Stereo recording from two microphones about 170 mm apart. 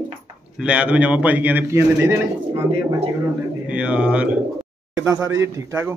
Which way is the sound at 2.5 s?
30° right (ahead or behind).